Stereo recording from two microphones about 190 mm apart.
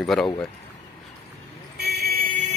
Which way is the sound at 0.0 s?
Centre (ahead or behind).